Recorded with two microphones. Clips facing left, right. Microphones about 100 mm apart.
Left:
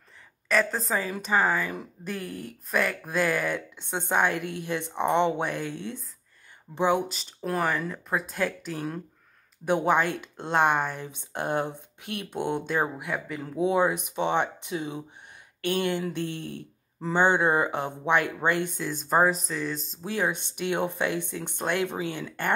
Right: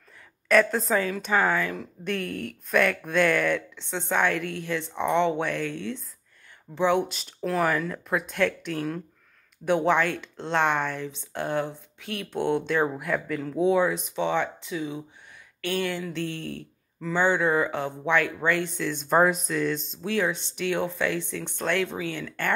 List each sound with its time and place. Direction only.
0.5 s a woman's voice: centre (ahead or behind)
7.5 s a woman's voice: centre (ahead or behind)
9.8 s speech: 15° left (ahead or behind)
13.4 s speech: 15° left (ahead or behind)
19.0 s a woman's voice: centre (ahead or behind)
20.5 s speech: 15° left (ahead or behind)